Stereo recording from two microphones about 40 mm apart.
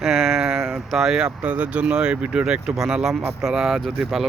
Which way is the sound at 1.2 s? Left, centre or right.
Right.